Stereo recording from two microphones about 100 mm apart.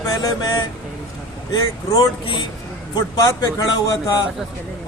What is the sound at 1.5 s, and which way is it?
Speech, 50° left (ahead or behind).